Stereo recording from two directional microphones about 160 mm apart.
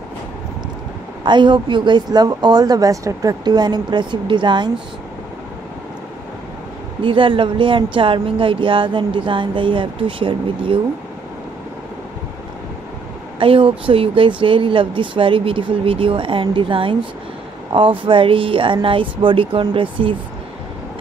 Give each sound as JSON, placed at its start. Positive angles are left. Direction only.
{"t": 1.2, "sound": "a woman's voice", "side_deg": -30}
{"t": 7.0, "sound": "speech", "side_deg": -30}
{"t": 13.4, "sound": "speech", "side_deg": -35}